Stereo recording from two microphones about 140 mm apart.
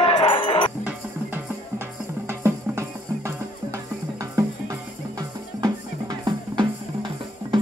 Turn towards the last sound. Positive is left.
turn(degrees=-35)  # may be behind; listen again after turning